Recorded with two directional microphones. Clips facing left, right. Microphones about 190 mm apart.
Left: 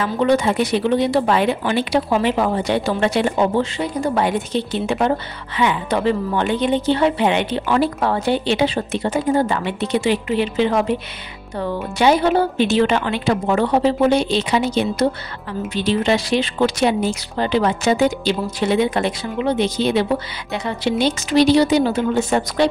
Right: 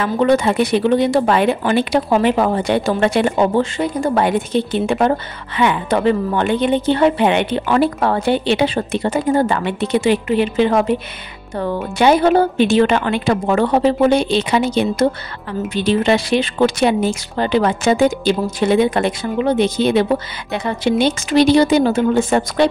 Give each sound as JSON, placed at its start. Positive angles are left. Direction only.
{"t": 0.0, "sound": "a woman's voice", "side_deg": -60}